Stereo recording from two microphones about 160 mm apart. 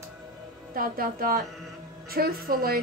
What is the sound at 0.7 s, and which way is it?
A woman's voice, 65° right (ahead or behind).